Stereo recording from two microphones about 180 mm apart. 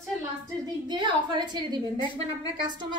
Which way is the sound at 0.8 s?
25° right (ahead or behind).